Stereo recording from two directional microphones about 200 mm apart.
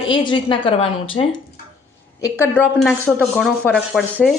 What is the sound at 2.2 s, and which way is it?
A woman's voice, 10° left (ahead or behind).